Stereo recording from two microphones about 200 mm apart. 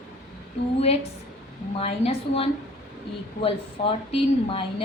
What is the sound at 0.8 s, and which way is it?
A woman's voice, 30° left (ahead or behind).